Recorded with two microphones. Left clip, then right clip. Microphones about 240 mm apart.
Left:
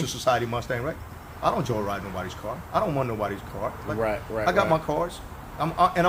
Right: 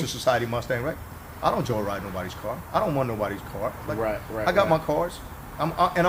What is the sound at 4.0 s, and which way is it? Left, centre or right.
Speech, left.